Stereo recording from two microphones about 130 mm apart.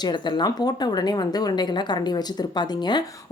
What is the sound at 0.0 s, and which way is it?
Speech, 35° left (ahead or behind).